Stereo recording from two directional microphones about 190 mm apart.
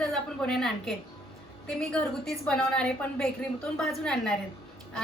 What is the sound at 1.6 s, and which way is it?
A woman's voice, 5° left (ahead or behind).